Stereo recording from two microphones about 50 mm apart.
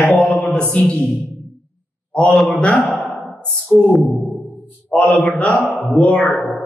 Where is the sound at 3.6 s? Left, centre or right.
Centre.